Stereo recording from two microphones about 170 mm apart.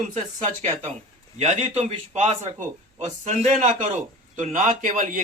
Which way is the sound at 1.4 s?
40° right (ahead or behind).